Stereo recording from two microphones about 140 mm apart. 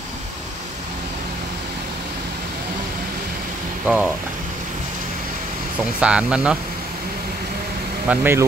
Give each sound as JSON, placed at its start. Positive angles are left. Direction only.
{"t": 3.8, "sound": "speech", "side_deg": -10}
{"t": 5.8, "sound": "speech", "side_deg": -10}
{"t": 8.1, "sound": "speech", "side_deg": -15}